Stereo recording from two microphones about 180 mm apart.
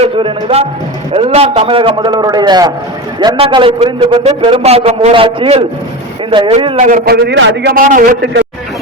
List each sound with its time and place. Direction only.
0.0 s music: 30° right (ahead or behind)
1.1 s a man's voice: 35° right (ahead or behind)
6.8 s a man's voice: 50° right (ahead or behind); by 7.7 s 75° right (ahead or behind)
7.7 s a man's voice: 50° right (ahead or behind)